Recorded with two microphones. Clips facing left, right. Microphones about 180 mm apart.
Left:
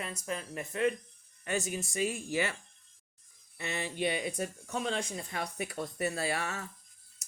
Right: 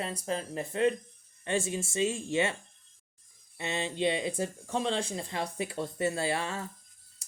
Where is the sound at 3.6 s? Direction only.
20° right (ahead or behind).